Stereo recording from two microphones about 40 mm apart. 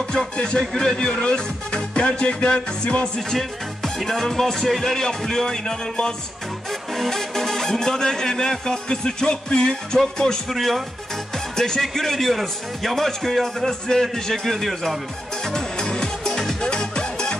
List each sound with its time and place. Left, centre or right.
0.6 s speech: centre
0.9 s music: left
3.2 s a man's voice: centre
5.0 s speech: centre
6.9 s speech: centre
10.5 s a man's voice: centre
11.3 s music: centre
11.8 s a man's voice: centre
15.4 s music: centre
16.3 s music: centre
16.6 s music: left